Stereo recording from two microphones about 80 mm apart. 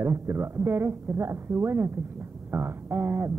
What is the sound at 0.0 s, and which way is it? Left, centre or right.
A woman's voice, right.